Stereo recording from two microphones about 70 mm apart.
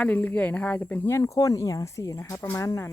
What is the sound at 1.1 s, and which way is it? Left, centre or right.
Speech, left.